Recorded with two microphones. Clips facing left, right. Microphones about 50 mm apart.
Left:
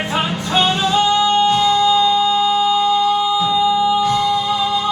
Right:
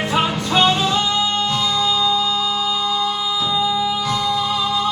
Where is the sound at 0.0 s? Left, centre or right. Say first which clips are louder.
Right 1 dB; left.